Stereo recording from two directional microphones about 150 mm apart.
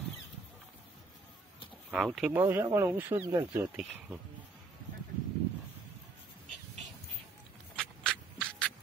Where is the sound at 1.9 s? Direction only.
Centre (ahead or behind).